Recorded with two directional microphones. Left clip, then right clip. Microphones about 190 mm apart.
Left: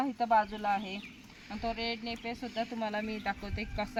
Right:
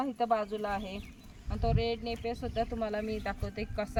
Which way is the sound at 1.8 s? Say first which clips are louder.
Right 3 dB; 35° right (ahead or behind).